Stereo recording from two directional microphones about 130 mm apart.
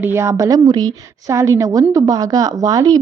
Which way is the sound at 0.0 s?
20° right (ahead or behind).